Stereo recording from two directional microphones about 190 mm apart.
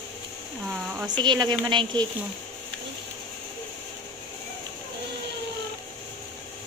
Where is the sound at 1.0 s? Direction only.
25° right (ahead or behind).